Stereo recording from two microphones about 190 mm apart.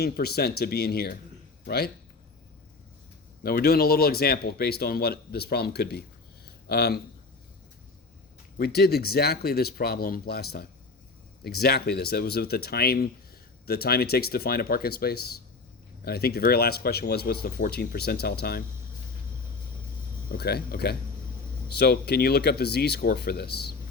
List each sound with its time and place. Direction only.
0.0 s speech: 55° left (ahead or behind)
3.4 s speech: 55° left (ahead or behind)
8.5 s speech: 55° left (ahead or behind)
20.3 s speech: 55° left (ahead or behind)